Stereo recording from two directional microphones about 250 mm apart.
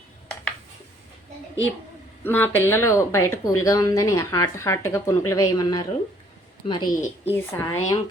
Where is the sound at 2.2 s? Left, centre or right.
Centre.